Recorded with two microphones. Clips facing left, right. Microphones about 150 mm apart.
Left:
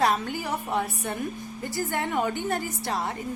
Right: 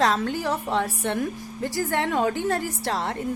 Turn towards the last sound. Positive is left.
turn(degrees=-70)  # may be behind; listen again after turning